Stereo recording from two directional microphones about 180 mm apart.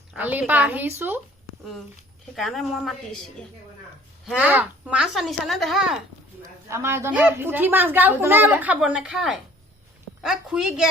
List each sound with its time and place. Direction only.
0.2 s a woman's voice: 10° right (ahead or behind)
2.3 s speech: centre (ahead or behind)
4.3 s speech: 10° right (ahead or behind)
6.7 s a woman's voice: 15° right (ahead or behind)